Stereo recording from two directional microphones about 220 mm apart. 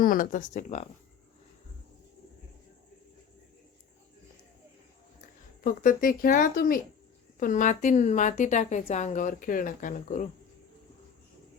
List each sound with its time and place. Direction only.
0.0 s a woman's voice: 40° left (ahead or behind)
5.6 s a woman's voice: 40° left (ahead or behind)